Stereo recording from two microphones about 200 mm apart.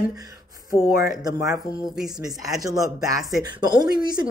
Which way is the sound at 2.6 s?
15° right (ahead or behind).